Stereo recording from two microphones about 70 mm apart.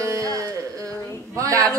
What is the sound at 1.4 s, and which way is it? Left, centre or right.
Speech, right.